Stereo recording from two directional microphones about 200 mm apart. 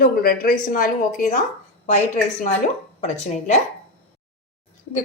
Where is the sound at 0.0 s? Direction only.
50° left (ahead or behind).